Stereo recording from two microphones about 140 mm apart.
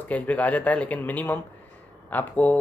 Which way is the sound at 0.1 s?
10° left (ahead or behind).